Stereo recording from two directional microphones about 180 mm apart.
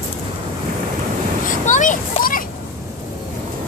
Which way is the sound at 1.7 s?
45° left (ahead or behind).